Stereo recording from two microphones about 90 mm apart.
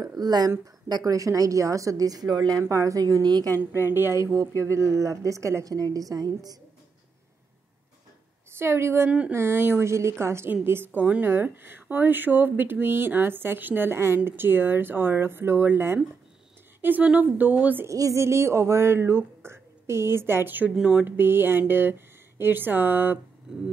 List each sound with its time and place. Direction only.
0.0 s a sound: 45° right (ahead or behind)
0.8 s speech: 45° right (ahead or behind)
3.5 s a woman's voice: 25° left (ahead or behind)
3.9 s a woman's voice: 25° right (ahead or behind); by 6.6 s 45° right (ahead or behind)
8.5 s speech: 30° right (ahead or behind)
17.8 s speech: 35° right (ahead or behind)